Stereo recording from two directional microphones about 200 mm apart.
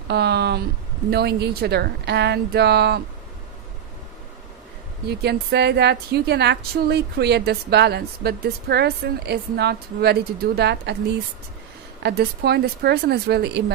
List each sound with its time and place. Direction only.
0.1 s a woman's voice: 55° right (ahead or behind)
5.0 s a woman's voice: 55° right (ahead or behind)
12.0 s a woman's voice: 55° right (ahead or behind)